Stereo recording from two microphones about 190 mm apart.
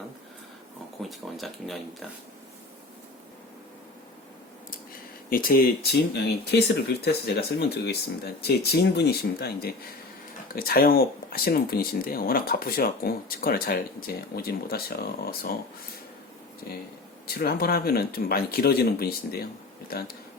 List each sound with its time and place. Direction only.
1.4 s speech: centre (ahead or behind)
5.3 s speech: 50° left (ahead or behind)
6.1 s speech: 60° left (ahead or behind)
17.2 s speech: 55° left (ahead or behind)